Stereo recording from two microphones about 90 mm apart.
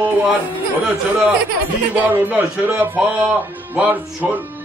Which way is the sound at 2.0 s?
20° right (ahead or behind).